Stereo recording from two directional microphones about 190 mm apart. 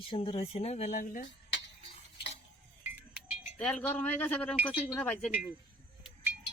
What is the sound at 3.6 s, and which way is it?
Speech, 5° left (ahead or behind).